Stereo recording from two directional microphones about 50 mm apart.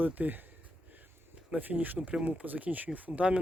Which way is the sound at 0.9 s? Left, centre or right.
Right.